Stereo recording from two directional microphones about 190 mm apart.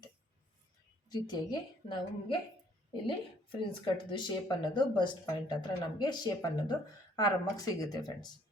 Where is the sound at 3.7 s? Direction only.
25° left (ahead or behind).